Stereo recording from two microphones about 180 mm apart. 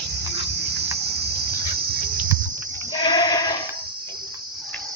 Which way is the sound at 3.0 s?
25° left (ahead or behind).